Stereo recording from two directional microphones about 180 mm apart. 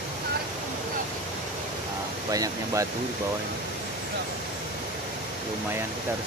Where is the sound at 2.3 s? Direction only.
20° right (ahead or behind).